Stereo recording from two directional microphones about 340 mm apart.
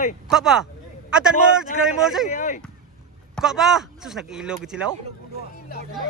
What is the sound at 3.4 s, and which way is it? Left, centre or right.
Speech, centre.